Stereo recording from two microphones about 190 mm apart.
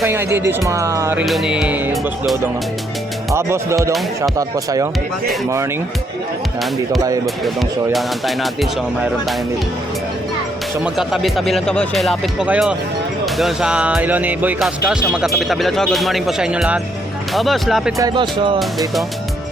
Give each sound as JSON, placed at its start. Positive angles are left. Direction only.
{"t": 0.0, "sound": "speech", "side_deg": -10}
{"t": 1.2, "sound": "speech", "side_deg": 0}
{"t": 3.3, "sound": "speech", "side_deg": -15}
{"t": 7.4, "sound": "speech", "side_deg": 0}
{"t": 10.8, "sound": "speech", "side_deg": 0}
{"t": 17.9, "sound": "speech", "side_deg": -20}
{"t": 18.6, "sound": "speech", "side_deg": 0}